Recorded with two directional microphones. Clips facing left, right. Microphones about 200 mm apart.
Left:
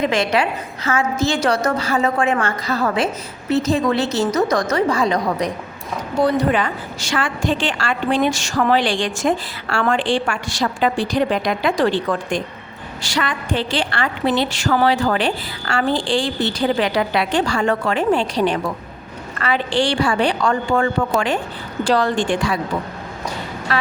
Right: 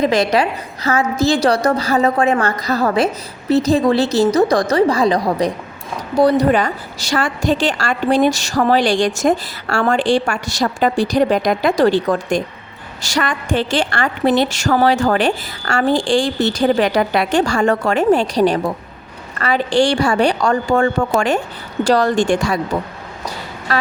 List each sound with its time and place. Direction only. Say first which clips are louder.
0.0 s a woman's voice: right 3 dB; 35° right (ahead or behind)
23.7 s a woman's voice: right 2 dB; 40° right (ahead or behind)